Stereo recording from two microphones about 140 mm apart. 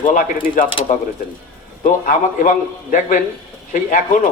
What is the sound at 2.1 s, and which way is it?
A man's voice, 75° left (ahead or behind).